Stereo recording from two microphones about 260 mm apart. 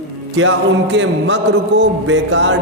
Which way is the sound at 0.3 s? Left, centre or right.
Right.